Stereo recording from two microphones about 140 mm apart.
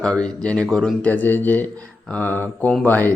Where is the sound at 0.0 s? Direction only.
5° left (ahead or behind).